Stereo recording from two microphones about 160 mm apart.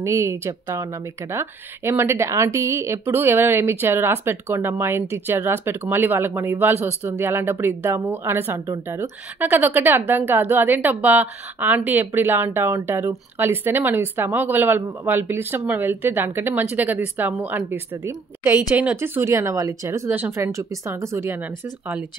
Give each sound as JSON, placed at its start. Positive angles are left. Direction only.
{"t": 0.0, "sound": "speech", "side_deg": -15}